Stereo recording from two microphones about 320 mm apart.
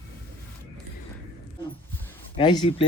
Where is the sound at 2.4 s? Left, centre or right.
Centre.